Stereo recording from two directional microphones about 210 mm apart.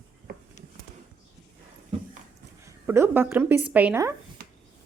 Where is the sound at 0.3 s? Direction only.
45° right (ahead or behind).